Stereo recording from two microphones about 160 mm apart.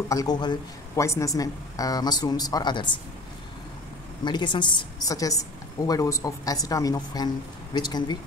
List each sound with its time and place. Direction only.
0.1 s a woman's voice: 25° left (ahead or behind)
4.2 s a woman's voice: 30° left (ahead or behind)